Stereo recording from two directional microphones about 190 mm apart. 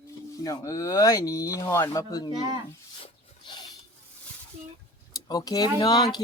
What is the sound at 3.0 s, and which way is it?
Rub, 25° left (ahead or behind).